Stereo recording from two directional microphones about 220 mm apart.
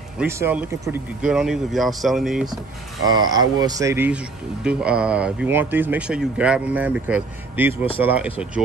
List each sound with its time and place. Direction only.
0.2 s speech: 10° right (ahead or behind)
3.1 s speech: 20° right (ahead or behind)